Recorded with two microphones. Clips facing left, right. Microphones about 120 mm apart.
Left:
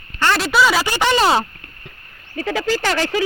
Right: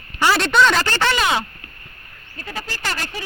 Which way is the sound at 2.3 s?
90° left.